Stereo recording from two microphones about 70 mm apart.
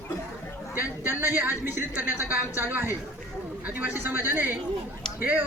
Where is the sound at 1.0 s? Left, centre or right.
Right.